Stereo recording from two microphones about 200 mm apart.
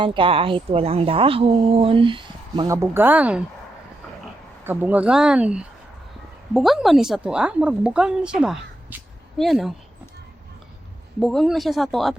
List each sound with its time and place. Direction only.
0.0 s a woman's voice: 25° right (ahead or behind); by 3.4 s 5° right (ahead or behind)
4.6 s a woman's voice: 10° right (ahead or behind)
11.2 s a woman's voice: centre (ahead or behind)